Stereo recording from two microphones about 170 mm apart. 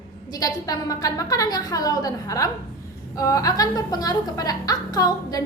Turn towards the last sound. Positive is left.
turn(degrees=20)  # may be behind; listen again after turning